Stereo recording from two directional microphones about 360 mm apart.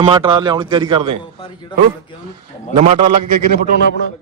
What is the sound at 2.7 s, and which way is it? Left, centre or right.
Speech, centre.